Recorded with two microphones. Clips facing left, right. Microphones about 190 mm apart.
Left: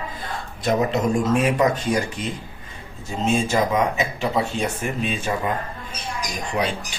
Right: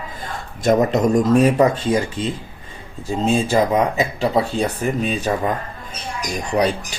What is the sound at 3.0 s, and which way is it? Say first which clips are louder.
Speech: right 3 dB; 35° right (ahead or behind).